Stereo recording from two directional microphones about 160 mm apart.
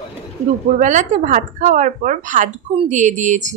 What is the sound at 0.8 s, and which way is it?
Speech, 50° right (ahead or behind).